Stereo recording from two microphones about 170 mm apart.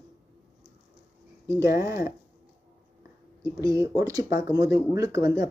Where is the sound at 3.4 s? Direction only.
20° right (ahead or behind).